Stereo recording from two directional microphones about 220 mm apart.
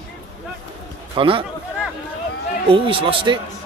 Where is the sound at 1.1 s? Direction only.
25° right (ahead or behind).